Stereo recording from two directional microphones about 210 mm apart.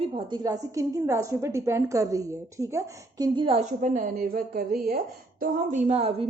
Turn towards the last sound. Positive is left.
turn(degrees=-30)  # may be behind; listen again after turning